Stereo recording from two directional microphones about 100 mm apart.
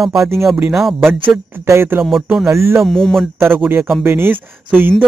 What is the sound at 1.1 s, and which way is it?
Speech, 25° right (ahead or behind).